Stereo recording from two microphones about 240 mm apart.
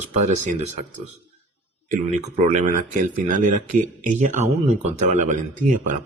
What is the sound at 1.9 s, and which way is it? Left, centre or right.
Speech, right.